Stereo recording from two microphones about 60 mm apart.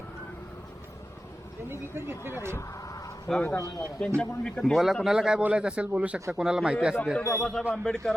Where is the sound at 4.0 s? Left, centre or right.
Centre.